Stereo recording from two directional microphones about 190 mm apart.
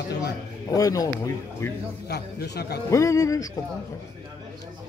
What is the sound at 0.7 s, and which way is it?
Speech, 20° left (ahead or behind).